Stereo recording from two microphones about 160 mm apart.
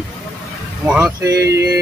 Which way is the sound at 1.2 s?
20° right (ahead or behind).